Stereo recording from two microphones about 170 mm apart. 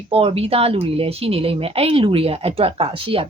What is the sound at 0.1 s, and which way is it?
Speech, 35° right (ahead or behind).